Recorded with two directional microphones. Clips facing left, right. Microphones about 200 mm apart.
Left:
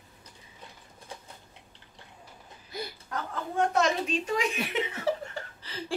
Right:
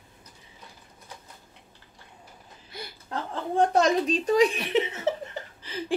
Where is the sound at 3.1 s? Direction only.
30° right (ahead or behind).